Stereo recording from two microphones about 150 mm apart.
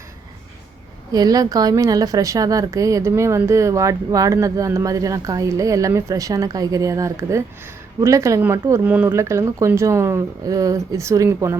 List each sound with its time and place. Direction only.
1.1 s a woman's voice: 25° right (ahead or behind)